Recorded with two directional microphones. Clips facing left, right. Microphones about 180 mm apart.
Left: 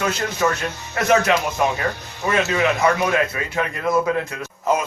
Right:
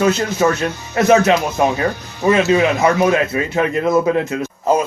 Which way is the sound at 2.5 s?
25° right (ahead or behind).